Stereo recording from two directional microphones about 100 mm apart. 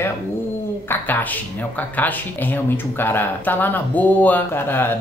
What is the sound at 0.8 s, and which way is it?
Speech, 20° left (ahead or behind).